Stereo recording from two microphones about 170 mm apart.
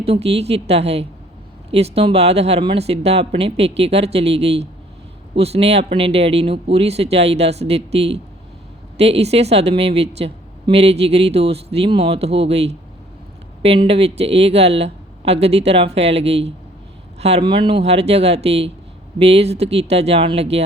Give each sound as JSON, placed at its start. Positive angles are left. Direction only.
{"t": 0.0, "sound": "a woman's voice", "side_deg": -35}